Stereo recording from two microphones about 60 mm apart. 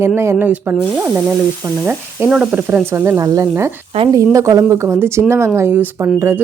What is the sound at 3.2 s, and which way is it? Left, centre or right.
A woman's voice, right.